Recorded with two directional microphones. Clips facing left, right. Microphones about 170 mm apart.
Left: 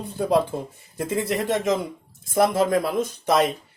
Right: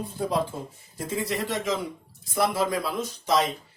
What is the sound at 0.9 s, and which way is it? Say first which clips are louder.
Speech: left 4 dB; 55° left (ahead or behind).